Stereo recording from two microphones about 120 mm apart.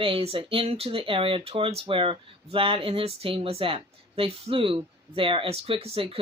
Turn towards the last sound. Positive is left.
turn(degrees=-50)  # may be behind; listen again after turning